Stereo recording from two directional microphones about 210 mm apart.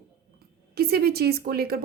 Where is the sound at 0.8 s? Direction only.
45° right (ahead or behind).